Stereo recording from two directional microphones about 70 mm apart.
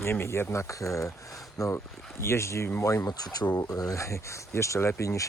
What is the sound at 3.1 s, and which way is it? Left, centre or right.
Speech, left.